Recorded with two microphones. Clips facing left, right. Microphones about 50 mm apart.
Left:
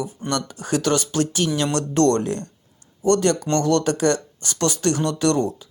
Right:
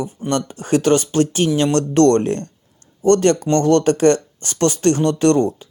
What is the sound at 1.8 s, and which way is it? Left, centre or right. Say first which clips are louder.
Speech: right 4 dB; right.